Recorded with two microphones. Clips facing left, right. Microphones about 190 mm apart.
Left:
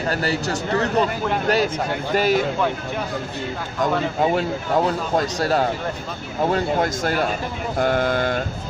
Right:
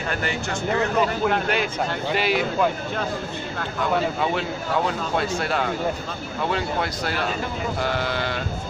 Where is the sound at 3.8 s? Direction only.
40° left (ahead or behind).